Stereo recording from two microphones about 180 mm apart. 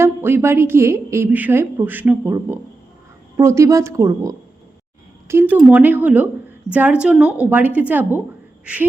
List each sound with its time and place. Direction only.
0.0 s a woman's voice: 15° right (ahead or behind)
8.6 s duck: 10° right (ahead or behind)